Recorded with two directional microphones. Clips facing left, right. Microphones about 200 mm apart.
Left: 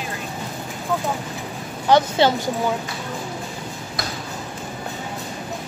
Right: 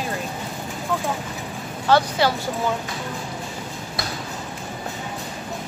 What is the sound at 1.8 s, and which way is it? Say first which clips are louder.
Speech: left 2 dB; 20° left (ahead or behind).